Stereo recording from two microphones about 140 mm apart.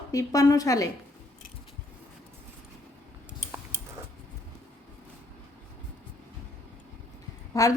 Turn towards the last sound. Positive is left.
turn(degrees=25)  # may be behind; listen again after turning